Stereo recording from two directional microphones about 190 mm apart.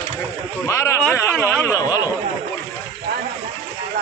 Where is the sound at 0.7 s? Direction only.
15° left (ahead or behind).